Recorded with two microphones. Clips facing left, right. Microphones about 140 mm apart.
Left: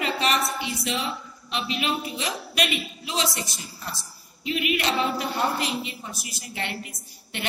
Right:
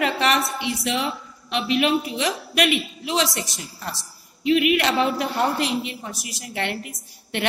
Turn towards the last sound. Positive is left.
turn(degrees=-65)  # may be behind; listen again after turning